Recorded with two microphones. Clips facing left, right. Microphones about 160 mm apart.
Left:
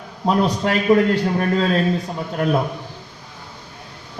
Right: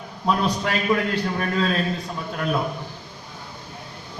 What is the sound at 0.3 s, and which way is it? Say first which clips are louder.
A man's voice: left 4 dB; 40° left (ahead or behind).